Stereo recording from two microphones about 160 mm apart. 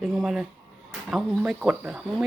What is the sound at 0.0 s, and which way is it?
Speech, centre (ahead or behind).